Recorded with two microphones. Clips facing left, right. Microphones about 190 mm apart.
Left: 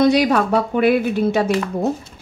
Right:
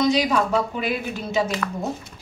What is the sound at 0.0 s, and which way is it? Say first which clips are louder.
A woman's voice: left 5 dB; 60° left (ahead or behind).